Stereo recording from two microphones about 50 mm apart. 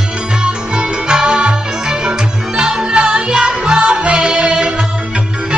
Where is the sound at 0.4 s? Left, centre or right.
Centre.